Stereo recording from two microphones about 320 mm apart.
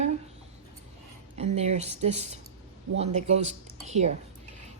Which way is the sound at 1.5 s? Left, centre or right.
Centre.